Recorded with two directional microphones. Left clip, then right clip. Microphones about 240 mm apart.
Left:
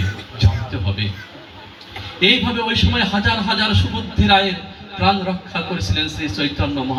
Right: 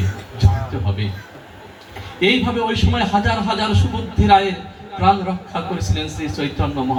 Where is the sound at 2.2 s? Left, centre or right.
Left.